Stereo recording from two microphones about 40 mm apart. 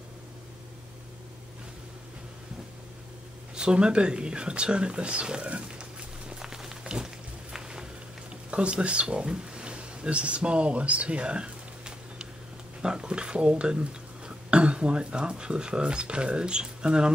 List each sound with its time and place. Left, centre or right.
3.5 s speech: right
6.4 s a sound: centre
8.5 s speech: right